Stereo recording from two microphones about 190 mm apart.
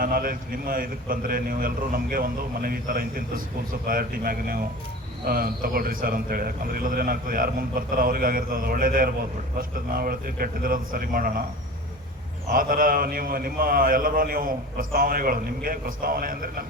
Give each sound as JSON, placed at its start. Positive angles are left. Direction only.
{"t": 0.0, "sound": "a man's voice", "side_deg": -45}
{"t": 12.5, "sound": "a man's voice", "side_deg": -45}